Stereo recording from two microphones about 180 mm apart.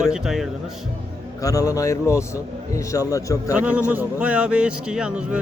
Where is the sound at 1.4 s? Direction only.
20° left (ahead or behind).